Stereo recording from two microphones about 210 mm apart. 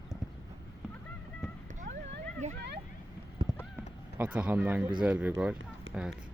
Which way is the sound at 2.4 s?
35° right (ahead or behind).